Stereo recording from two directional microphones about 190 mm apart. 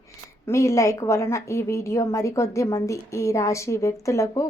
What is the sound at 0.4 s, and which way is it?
A woman's voice, 15° left (ahead or behind).